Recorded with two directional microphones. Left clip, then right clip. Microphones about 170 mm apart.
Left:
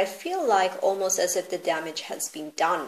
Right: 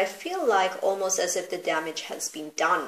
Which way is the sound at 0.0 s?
35° left (ahead or behind).